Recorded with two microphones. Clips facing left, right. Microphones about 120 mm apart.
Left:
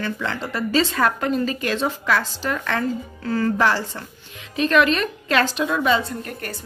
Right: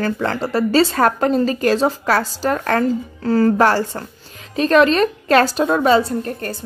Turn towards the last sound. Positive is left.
turn(degrees=-35)  # may be behind; listen again after turning